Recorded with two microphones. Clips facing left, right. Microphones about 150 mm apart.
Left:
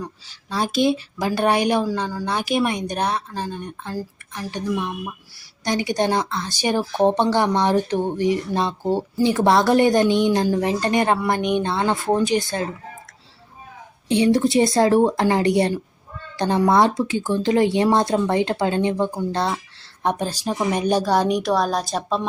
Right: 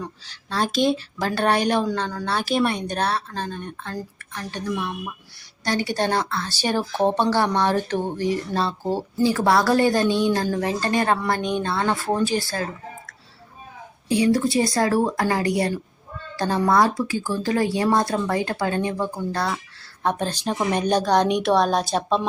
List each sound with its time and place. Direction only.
0.0 s speech: 10° left (ahead or behind)
14.1 s a woman's voice: 25° left (ahead or behind); by 22.3 s centre (ahead or behind)